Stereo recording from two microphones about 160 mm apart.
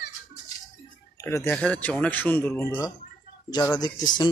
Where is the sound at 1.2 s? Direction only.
15° left (ahead or behind).